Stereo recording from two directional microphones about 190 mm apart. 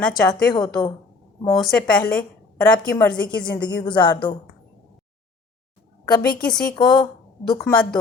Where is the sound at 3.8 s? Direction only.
25° left (ahead or behind).